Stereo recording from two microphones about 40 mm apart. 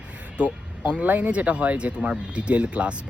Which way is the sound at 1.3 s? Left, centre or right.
Right.